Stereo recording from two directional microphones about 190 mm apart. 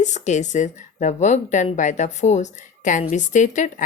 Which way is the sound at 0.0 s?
40° left (ahead or behind).